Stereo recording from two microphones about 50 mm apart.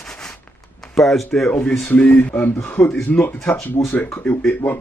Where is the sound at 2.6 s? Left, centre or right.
Left.